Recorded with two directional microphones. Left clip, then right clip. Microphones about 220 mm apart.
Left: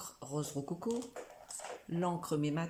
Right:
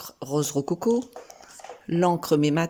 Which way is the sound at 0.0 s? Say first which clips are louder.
Right 14 dB; 45° right (ahead or behind).